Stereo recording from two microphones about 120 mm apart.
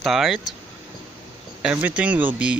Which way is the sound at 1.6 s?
10° right (ahead or behind).